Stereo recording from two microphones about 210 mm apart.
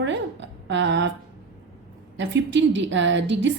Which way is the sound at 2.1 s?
60° right (ahead or behind).